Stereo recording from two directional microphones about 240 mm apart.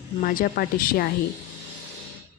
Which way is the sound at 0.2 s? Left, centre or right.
Left.